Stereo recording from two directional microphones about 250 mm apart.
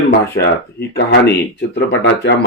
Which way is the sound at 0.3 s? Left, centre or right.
Left.